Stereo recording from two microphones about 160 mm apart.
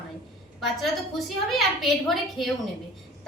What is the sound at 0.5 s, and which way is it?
A woman's voice, centre (ahead or behind).